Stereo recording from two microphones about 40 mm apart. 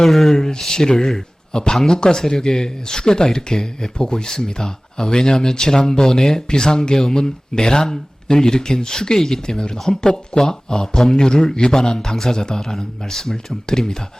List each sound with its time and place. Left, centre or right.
0.0 s speech: centre
10.0 s speech: centre